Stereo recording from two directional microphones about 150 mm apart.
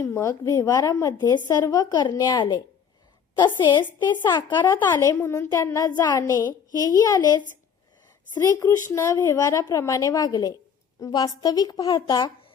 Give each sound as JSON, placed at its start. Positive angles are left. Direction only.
{"t": 0.0, "sound": "a woman's voice", "side_deg": 20}
{"t": 8.4, "sound": "a woman's voice", "side_deg": 20}